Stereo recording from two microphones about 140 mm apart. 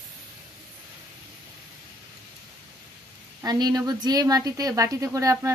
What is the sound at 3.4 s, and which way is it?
A woman's voice, 30° right (ahead or behind).